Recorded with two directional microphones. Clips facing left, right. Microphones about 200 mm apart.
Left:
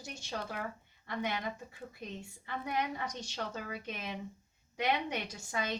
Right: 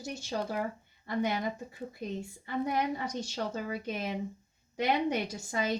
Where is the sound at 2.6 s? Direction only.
35° right (ahead or behind).